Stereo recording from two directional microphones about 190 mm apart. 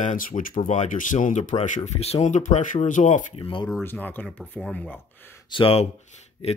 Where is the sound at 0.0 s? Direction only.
45° left (ahead or behind).